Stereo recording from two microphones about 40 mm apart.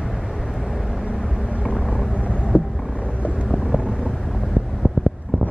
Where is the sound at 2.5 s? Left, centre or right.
Right.